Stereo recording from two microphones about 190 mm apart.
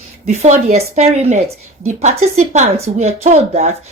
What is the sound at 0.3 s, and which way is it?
A woman's voice, 35° right (ahead or behind).